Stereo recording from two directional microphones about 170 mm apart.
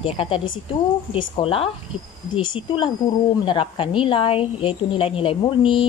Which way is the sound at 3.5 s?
30° left (ahead or behind).